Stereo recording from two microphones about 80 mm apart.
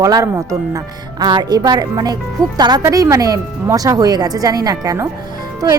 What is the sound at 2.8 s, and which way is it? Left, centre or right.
Speech, right.